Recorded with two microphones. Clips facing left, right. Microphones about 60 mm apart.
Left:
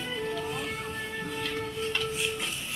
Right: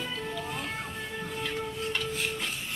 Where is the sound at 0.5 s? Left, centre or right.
Centre.